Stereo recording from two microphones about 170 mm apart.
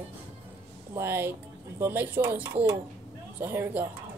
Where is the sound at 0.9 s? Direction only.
15° right (ahead or behind).